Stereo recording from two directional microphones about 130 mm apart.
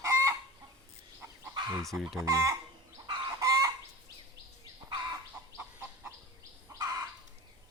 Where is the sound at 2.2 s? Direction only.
25° right (ahead or behind).